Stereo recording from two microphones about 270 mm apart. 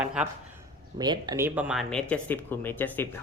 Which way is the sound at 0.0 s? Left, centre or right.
Centre.